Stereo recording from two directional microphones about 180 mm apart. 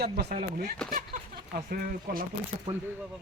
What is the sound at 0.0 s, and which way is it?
Speech, 60° right (ahead or behind).